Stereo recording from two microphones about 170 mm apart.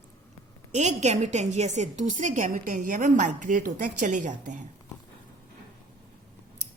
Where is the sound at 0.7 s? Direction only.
40° right (ahead or behind).